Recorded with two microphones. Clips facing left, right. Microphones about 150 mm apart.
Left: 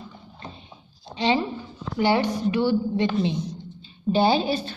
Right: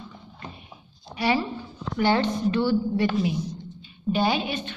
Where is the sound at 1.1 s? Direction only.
20° left (ahead or behind).